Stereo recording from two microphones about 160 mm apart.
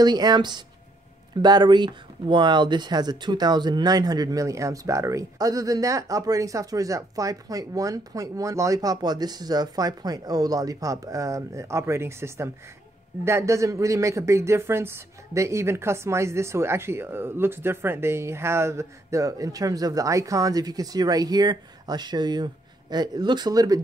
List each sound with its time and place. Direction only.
0.0 s speech: 25° right (ahead or behind)